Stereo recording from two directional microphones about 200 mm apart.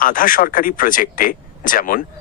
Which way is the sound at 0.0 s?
45° left (ahead or behind).